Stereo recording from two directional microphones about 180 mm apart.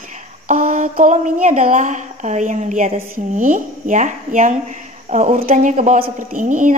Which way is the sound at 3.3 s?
45° right (ahead or behind).